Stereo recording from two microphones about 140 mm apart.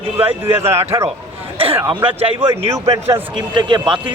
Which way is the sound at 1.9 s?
40° right (ahead or behind).